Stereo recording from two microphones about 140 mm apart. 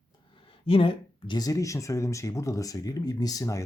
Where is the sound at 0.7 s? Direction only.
40° left (ahead or behind).